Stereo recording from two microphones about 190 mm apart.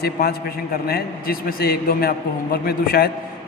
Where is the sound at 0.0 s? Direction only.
55° left (ahead or behind).